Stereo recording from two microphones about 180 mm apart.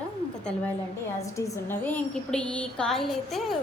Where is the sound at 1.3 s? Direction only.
15° left (ahead or behind).